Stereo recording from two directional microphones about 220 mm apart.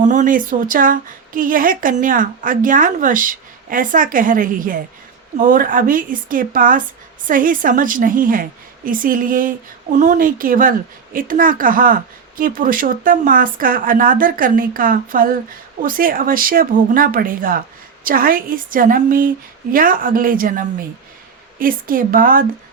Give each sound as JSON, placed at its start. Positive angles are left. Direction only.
{"t": 0.0, "sound": "a woman's voice", "side_deg": -35}